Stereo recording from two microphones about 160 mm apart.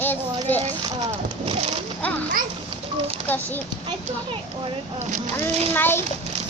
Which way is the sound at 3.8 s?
30° right (ahead or behind).